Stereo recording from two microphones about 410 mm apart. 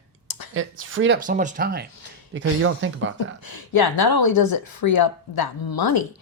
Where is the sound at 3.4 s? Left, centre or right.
Left.